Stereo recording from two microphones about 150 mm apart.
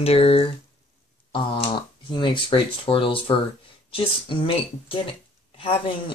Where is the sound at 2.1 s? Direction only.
35° left (ahead or behind).